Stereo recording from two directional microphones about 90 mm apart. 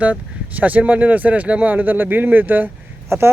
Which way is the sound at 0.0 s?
15° right (ahead or behind).